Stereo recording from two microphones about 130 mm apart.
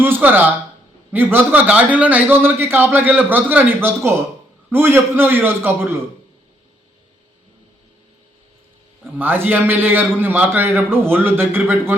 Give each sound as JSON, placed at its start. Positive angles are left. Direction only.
{"t": 0.0, "sound": "a man's voice", "side_deg": -15}
{"t": 9.1, "sound": "a man's voice", "side_deg": -15}